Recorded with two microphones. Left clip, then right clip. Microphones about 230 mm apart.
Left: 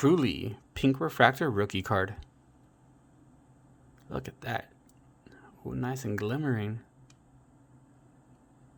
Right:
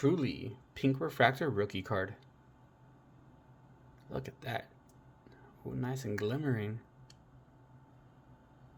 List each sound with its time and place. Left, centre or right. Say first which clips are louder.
0.0 s speech: left 7 dB; left
4.1 s speech: left 4 dB; left